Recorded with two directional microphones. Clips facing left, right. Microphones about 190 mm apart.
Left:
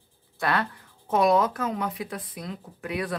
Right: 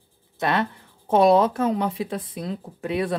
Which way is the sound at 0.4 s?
20° right (ahead or behind).